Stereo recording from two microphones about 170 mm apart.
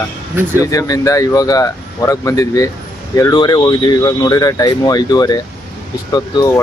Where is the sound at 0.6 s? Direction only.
20° left (ahead or behind).